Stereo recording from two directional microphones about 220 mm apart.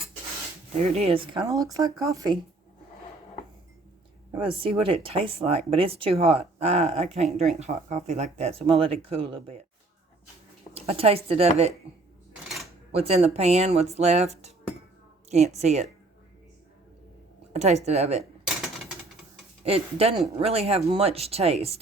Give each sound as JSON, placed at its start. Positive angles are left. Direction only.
{"t": 0.9, "sound": "speech", "side_deg": -25}
{"t": 4.4, "sound": "speech", "side_deg": -25}
{"t": 10.8, "sound": "speech", "side_deg": -25}
{"t": 12.9, "sound": "speech", "side_deg": -30}
{"t": 15.3, "sound": "speech", "side_deg": -30}
{"t": 17.5, "sound": "speech", "side_deg": -30}
{"t": 19.6, "sound": "speech", "side_deg": -25}